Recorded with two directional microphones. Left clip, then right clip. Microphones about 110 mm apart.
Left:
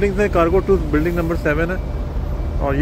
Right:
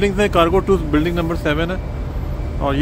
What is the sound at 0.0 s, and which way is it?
Speech, 35° right (ahead or behind).